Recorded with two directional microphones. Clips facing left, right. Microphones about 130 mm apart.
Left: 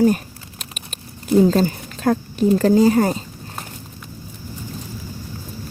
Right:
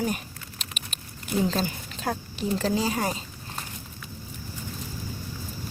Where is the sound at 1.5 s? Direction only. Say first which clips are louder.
Left 10 dB; 50° left (ahead or behind).